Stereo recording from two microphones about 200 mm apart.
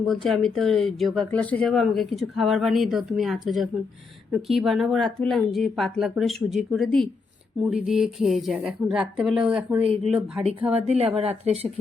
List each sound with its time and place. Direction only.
0.0 s speech: centre (ahead or behind)
10.7 s speech: 30° right (ahead or behind)